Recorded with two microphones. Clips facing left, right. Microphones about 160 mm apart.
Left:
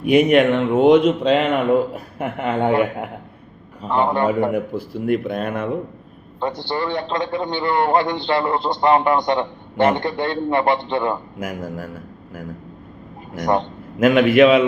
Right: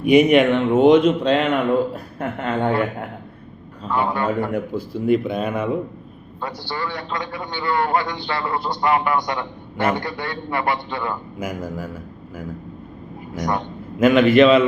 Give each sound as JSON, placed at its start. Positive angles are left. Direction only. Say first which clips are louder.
{"t": 0.0, "sound": "a man's voice", "louder": "even", "side_deg": 0}
{"t": 4.5, "sound": "speech", "louder": "left 1 dB", "side_deg": 5}
{"t": 6.7, "sound": "a man's voice", "louder": "left 4 dB", "side_deg": 25}
{"t": 11.3, "sound": "speech", "louder": "even", "side_deg": 0}
{"t": 14.0, "sound": "a man's voice", "louder": "even", "side_deg": 5}